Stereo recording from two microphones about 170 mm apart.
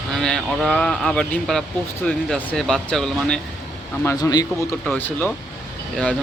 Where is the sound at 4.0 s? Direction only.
20° left (ahead or behind).